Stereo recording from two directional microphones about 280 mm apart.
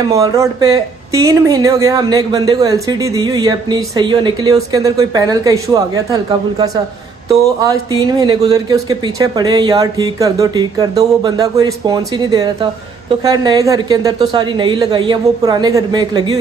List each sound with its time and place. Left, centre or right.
0.1 s speech: centre